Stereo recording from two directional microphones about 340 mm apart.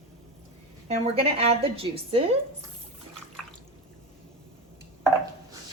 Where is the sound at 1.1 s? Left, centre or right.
Centre.